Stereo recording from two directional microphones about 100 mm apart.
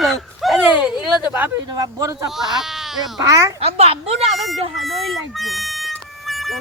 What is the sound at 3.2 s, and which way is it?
Speech, 35° right (ahead or behind).